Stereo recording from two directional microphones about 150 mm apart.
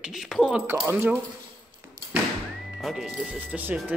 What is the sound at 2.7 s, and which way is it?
Speech, centre (ahead or behind).